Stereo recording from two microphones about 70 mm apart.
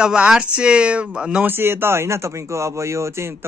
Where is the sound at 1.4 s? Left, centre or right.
Right.